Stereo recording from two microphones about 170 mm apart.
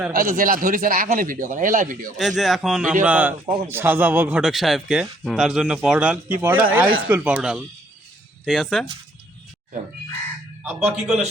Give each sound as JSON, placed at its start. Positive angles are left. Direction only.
{"t": 0.1, "sound": "speech", "side_deg": -55}
{"t": 2.1, "sound": "a man's voice", "side_deg": 0}
{"t": 10.6, "sound": "a man's voice", "side_deg": -5}